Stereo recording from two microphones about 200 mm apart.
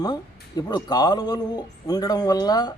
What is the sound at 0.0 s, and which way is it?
A man's voice, 20° left (ahead or behind).